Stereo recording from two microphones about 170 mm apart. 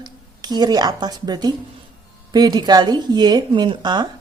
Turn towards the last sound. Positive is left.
turn(degrees=-25)  # may be behind; listen again after turning